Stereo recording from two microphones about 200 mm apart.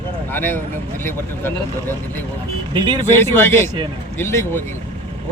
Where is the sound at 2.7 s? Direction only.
25° right (ahead or behind).